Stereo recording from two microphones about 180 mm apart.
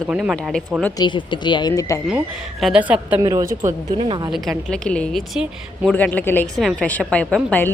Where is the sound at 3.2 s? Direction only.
20° right (ahead or behind).